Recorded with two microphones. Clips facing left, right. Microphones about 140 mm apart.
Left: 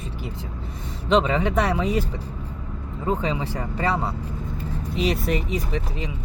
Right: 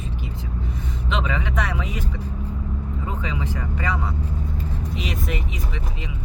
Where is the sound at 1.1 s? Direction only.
35° left (ahead or behind).